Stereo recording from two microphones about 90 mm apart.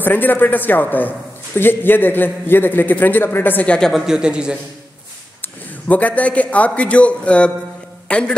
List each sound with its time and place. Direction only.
0.0 s a man's voice: 20° left (ahead or behind)
3.9 s a man's voice: 5° right (ahead or behind)
5.4 s a man's voice: 15° left (ahead or behind)